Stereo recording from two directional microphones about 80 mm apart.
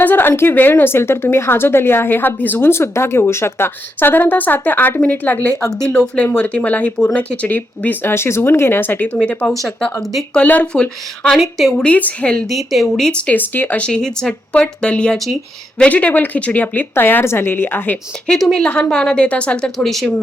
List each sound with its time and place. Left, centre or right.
0.0 s a woman's voice: left
9.5 s speech: centre
10.3 s speech: centre
11.3 s speech: centre
11.9 s speech: centre
12.5 s a woman's voice: centre; by 17.9 s left
18.3 s speech: centre